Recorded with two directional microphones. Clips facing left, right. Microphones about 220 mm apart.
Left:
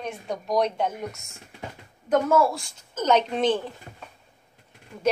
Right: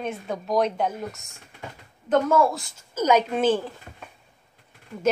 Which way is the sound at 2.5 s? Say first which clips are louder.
Right 1 dB; 5° right (ahead or behind).